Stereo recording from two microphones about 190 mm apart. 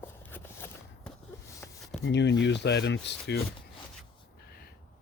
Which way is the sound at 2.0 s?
65° left (ahead or behind).